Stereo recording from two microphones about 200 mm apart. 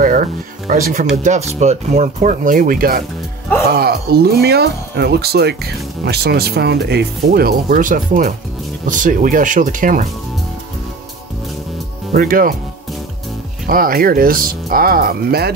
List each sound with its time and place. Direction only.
0.0 s speech: 45° right (ahead or behind)
12.1 s speech: 45° right (ahead or behind)
13.7 s speech: 45° right (ahead or behind)